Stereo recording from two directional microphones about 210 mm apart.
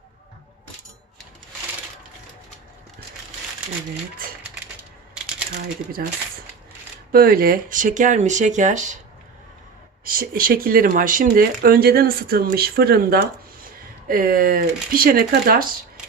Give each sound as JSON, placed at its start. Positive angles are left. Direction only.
{"t": 7.1, "sound": "speech", "side_deg": -45}
{"t": 10.0, "sound": "speech", "side_deg": -45}